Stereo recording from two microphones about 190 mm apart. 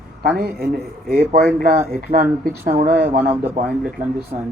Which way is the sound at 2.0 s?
45° right (ahead or behind).